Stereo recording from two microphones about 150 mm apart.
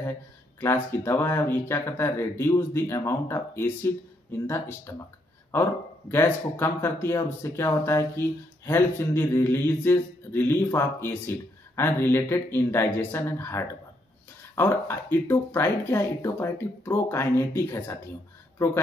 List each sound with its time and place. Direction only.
0.6 s speech: 15° left (ahead or behind)